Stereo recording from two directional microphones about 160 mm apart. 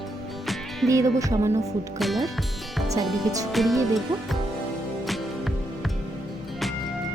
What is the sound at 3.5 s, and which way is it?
Speech, centre (ahead or behind).